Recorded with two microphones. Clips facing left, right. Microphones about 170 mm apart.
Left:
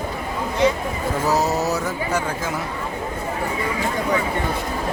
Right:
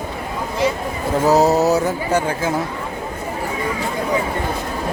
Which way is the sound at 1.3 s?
30° right (ahead or behind).